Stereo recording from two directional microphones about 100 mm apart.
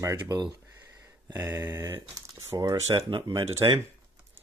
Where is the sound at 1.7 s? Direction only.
35° right (ahead or behind).